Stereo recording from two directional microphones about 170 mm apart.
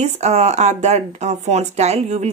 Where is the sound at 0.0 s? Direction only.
40° right (ahead or behind).